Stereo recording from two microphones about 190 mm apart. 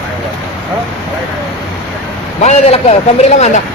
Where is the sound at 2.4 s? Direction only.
40° left (ahead or behind).